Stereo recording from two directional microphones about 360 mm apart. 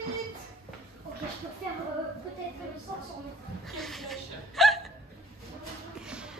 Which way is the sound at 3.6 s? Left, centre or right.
Centre.